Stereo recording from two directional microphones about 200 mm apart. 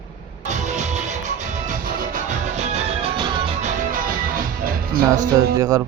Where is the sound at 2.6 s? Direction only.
30° right (ahead or behind).